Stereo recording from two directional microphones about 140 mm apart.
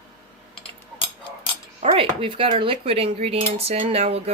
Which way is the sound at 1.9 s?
40° right (ahead or behind).